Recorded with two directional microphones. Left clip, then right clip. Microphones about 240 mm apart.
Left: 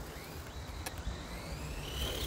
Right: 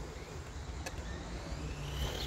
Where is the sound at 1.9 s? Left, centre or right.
Left.